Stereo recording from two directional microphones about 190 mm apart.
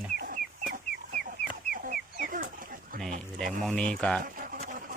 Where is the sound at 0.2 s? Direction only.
45° right (ahead or behind).